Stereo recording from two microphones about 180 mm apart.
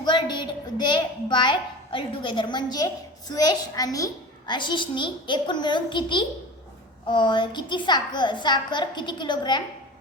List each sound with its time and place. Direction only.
0.0 s a woman's voice: 25° left (ahead or behind)